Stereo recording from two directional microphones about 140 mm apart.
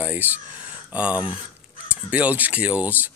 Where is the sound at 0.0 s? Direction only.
10° right (ahead or behind).